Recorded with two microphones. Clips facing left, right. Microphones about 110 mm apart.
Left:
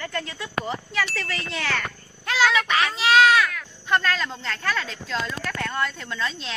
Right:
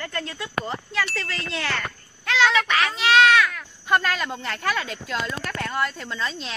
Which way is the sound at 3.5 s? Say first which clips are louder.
Right 1 dB; 10° right (ahead or behind).